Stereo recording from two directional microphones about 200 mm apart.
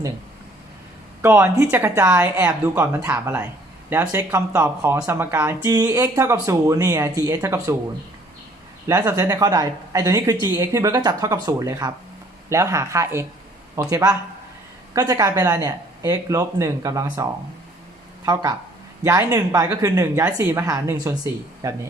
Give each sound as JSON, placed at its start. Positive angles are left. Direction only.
{"t": 1.2, "sound": "speech", "side_deg": -10}
{"t": 8.9, "sound": "speech", "side_deg": -20}
{"t": 19.0, "sound": "speech", "side_deg": -15}